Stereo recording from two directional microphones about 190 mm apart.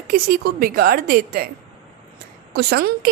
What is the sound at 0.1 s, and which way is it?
A woman's voice, 50° right (ahead or behind).